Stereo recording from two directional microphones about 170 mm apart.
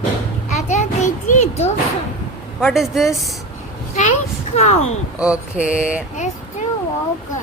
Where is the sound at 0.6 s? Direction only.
45° left (ahead or behind).